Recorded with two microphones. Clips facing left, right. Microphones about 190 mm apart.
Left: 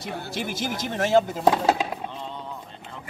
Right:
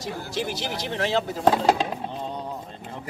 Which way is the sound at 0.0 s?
55° left (ahead or behind).